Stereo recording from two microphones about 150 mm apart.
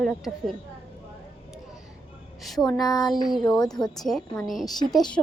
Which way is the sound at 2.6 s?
15° left (ahead or behind).